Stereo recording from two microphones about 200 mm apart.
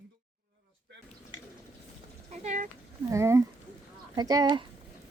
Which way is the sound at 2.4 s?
35° right (ahead or behind).